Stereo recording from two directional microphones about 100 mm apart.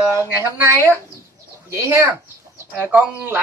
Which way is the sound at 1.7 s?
25° right (ahead or behind).